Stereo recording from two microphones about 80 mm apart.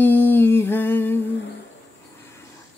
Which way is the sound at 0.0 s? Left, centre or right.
Left.